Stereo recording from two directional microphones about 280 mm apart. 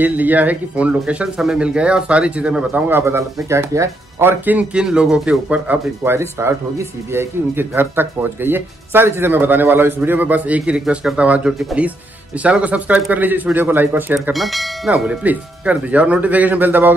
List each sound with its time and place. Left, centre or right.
0.0 s speech: centre